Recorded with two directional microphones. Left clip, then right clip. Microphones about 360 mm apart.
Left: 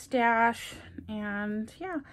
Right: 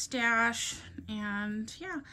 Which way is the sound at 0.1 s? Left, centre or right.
Centre.